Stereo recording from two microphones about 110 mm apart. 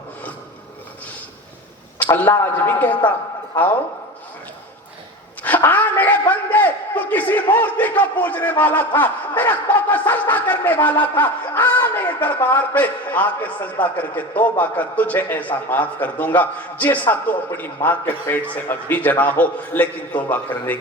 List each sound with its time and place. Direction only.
2.1 s a man's voice: 20° left (ahead or behind)
5.4 s a sound: 15° left (ahead or behind)
7.5 s a man's voice: 15° left (ahead or behind)